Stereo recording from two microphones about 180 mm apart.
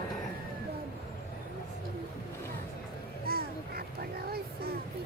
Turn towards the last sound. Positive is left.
turn(degrees=-55)  # may be behind; listen again after turning